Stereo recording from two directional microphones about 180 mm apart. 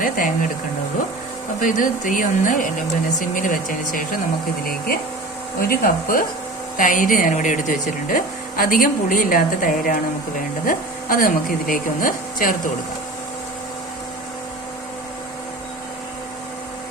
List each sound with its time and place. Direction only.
0.0 s speech: 50° left (ahead or behind)
1.6 s speech: 50° left (ahead or behind)
5.5 s speech: 55° left (ahead or behind)